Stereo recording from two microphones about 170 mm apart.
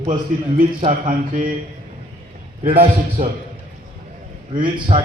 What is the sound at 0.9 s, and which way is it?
Mantra, 55° right (ahead or behind).